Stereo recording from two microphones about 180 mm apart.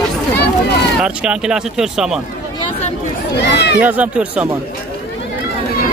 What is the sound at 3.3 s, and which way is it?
Speech, 65° left (ahead or behind).